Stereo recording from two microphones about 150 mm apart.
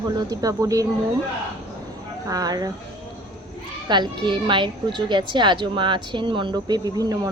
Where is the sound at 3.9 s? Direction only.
30° right (ahead or behind).